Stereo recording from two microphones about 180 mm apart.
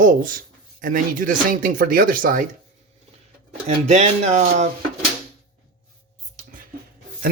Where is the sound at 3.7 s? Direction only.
35° right (ahead or behind).